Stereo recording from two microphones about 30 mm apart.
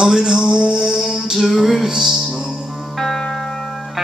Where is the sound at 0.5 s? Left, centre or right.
Right.